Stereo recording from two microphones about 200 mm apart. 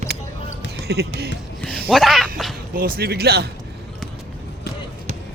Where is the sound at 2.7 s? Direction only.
50° right (ahead or behind).